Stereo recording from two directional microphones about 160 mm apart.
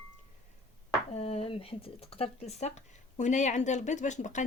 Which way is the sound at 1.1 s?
40° left (ahead or behind).